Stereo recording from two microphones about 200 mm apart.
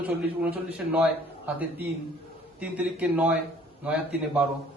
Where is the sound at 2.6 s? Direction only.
5° right (ahead or behind).